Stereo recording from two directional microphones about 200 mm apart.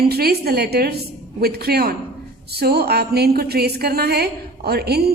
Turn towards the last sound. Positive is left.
turn(degrees=-55)  # may be behind; listen again after turning